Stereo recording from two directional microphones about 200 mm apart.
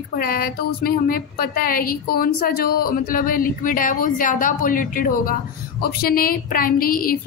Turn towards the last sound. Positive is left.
turn(degrees=45)  # may be behind; listen again after turning